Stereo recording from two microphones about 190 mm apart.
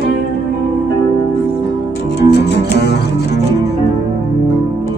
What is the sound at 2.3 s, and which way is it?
Music, 60° left (ahead or behind).